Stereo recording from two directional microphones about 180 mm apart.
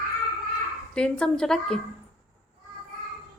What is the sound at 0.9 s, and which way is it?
Speech, 5° left (ahead or behind).